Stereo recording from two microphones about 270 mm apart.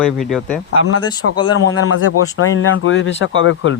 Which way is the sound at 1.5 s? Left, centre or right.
Left.